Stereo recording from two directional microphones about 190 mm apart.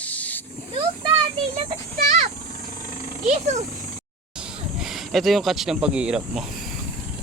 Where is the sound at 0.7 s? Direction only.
30° right (ahead or behind).